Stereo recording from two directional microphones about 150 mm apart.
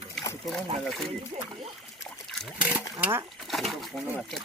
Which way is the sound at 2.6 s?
10° right (ahead or behind).